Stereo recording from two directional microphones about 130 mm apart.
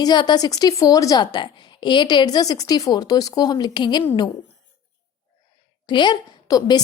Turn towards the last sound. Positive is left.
turn(degrees=30)  # may be behind; listen again after turning